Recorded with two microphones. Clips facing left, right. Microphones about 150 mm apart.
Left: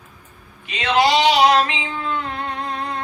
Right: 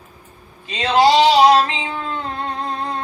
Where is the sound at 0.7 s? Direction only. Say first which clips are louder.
Right 3 dB; 35° right (ahead or behind).